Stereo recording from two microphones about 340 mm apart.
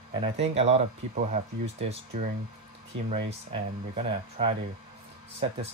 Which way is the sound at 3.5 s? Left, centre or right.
Centre.